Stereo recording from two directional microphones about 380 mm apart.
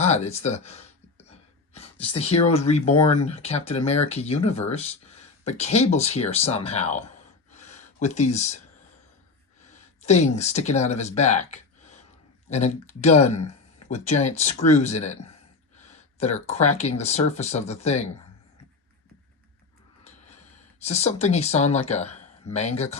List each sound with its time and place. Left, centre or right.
0.0 s speech: centre
1.2 s a sound: centre
2.0 s speech: centre
7.5 s a sound: centre
10.0 s speech: centre
20.1 s speech: centre